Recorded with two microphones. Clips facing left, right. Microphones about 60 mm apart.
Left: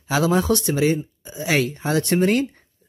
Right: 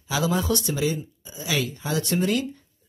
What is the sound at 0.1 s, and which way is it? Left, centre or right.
Speech, left.